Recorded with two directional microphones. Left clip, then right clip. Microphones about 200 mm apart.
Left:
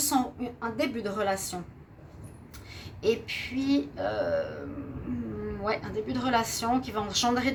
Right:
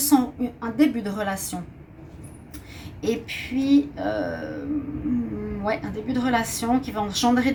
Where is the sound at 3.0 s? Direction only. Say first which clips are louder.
Right 1 dB; 40° left (ahead or behind).